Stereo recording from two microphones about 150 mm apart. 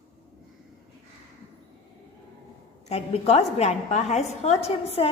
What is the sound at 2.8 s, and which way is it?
A woman's voice, 45° left (ahead or behind).